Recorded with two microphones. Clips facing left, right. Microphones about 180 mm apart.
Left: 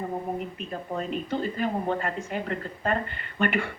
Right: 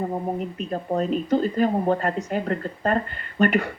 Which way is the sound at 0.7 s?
40° right (ahead or behind).